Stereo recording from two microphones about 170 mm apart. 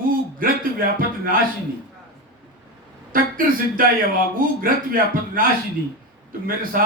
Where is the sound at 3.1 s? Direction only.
55° right (ahead or behind).